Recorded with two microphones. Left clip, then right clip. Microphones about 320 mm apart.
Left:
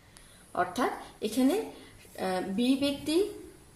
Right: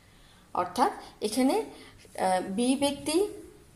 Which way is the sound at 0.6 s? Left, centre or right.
Centre.